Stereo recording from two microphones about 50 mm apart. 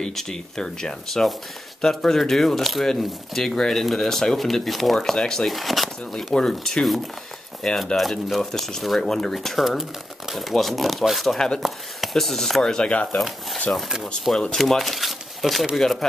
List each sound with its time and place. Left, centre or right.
0.0 s speech: centre
5.5 s speech: centre
6.3 s speech: centre
11.3 s speech: centre
11.6 s speech: centre
12.6 s speech: centre
13.8 s speech: centre
14.5 s speech: centre